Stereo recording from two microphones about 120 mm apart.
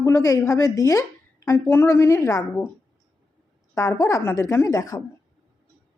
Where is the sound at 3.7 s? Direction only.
30° left (ahead or behind).